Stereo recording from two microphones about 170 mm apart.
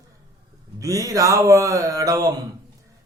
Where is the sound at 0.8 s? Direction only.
20° right (ahead or behind).